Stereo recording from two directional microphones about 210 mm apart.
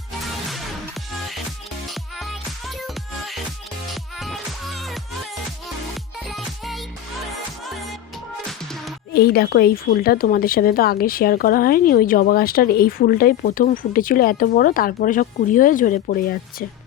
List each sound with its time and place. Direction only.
1.9 s music: centre (ahead or behind)
6.2 s music: centre (ahead or behind)
8.4 s music: centre (ahead or behind)
9.1 s a woman's voice: 45° left (ahead or behind)